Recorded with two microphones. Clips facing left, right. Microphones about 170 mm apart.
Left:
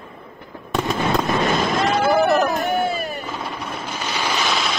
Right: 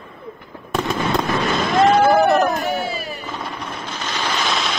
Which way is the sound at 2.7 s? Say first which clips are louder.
Left 2 dB; 50° left (ahead or behind).